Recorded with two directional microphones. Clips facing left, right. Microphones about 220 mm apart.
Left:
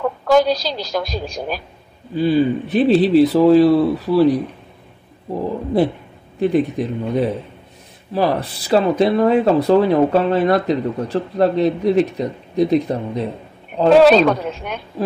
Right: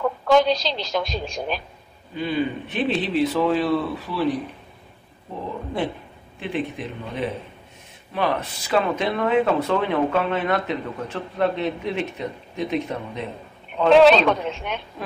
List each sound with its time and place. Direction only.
0.3 s speech: 40° left (ahead or behind)
6.4 s speech: 40° left (ahead or behind)